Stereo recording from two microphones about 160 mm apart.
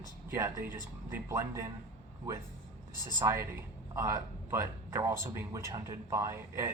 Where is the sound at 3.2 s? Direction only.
15° right (ahead or behind).